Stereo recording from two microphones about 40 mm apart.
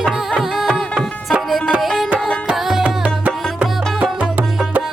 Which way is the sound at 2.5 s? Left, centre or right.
Centre.